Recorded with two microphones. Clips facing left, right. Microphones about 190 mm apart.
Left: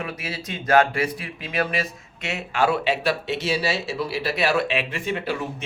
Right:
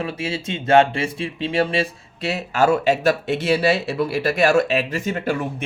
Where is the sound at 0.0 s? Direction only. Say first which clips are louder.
Right 6 dB; 30° right (ahead or behind).